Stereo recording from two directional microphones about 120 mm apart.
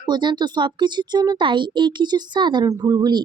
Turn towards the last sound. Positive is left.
turn(degrees=-35)  # may be behind; listen again after turning